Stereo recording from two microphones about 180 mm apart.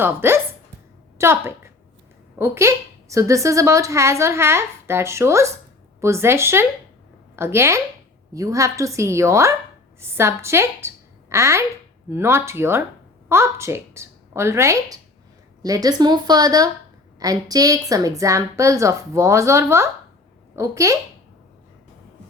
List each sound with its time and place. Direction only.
0.0 s a woman's voice: 10° right (ahead or behind)